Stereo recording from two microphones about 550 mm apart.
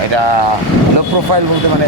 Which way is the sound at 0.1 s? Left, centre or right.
Right.